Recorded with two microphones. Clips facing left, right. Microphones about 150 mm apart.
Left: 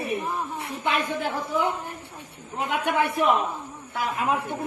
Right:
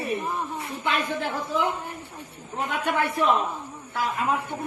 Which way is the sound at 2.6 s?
15° left (ahead or behind).